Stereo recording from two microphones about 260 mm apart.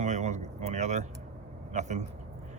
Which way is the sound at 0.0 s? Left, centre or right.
Right.